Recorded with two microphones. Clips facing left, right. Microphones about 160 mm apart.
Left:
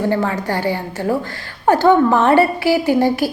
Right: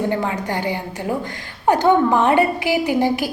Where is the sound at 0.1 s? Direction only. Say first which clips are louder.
Left 3 dB; 15° right (ahead or behind).